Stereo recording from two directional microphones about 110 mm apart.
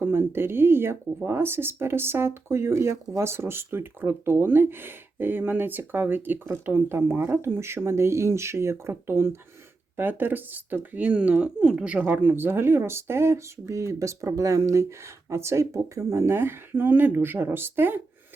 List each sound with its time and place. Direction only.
0.0 s speech: 20° right (ahead or behind)